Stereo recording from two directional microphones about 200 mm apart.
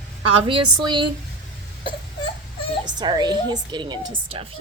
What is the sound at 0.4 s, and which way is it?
Speech, 25° right (ahead or behind).